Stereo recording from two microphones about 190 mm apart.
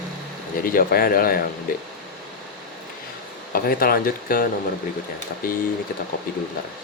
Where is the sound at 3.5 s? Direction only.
50° left (ahead or behind).